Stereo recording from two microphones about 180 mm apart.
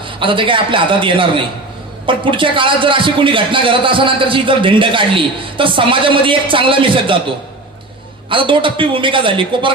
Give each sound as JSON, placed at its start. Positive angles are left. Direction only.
{"t": 0.0, "sound": "a man's voice", "side_deg": -30}
{"t": 8.3, "sound": "a man's voice", "side_deg": -30}